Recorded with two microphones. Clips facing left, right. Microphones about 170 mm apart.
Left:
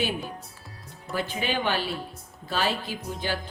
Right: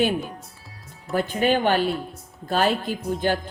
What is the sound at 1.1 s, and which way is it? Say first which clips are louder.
Speech: right 7 dB; 50° right (ahead or behind).